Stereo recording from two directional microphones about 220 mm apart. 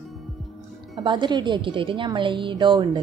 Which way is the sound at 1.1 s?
20° right (ahead or behind).